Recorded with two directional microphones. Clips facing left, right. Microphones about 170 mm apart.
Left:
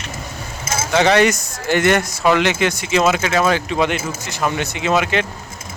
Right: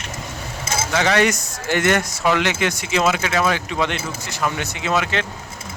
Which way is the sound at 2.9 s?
40° left (ahead or behind).